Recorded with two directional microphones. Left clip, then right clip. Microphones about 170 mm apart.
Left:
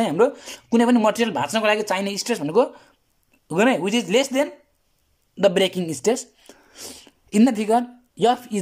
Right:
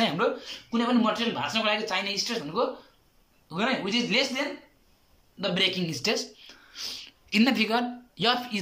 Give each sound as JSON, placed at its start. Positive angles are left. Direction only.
{"t": 0.0, "sound": "speech", "side_deg": 45}